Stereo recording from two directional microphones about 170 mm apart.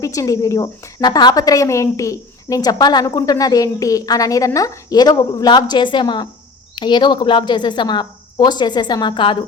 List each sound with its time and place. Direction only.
0.0 s speech: 20° left (ahead or behind)